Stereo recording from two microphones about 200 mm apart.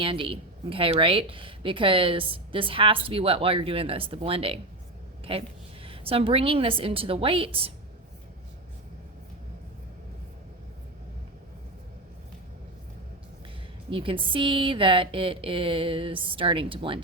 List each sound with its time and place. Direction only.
0.0 s a woman's voice: 25° right (ahead or behind)
13.9 s speech: 25° right (ahead or behind)